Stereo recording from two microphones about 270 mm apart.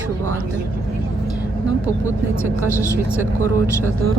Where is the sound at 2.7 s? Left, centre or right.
Centre.